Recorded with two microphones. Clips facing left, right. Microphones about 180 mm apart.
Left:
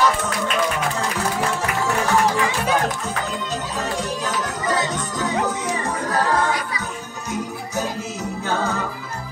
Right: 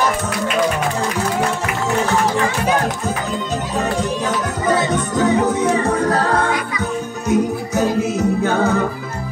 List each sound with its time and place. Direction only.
4.6 s music: 60° right (ahead or behind)